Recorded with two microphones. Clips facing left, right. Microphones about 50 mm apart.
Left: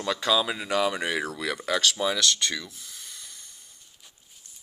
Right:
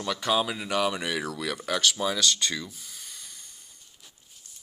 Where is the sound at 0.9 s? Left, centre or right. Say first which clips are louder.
Left 2 dB; left.